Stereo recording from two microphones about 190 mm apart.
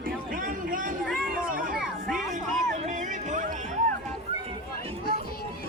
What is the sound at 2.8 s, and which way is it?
Music, 40° right (ahead or behind).